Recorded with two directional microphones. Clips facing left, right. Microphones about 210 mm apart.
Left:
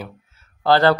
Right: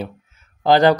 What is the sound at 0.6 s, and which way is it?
Speech, 15° right (ahead or behind).